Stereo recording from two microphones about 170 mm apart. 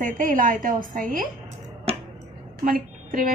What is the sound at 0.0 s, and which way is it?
A woman's voice, 55° right (ahead or behind).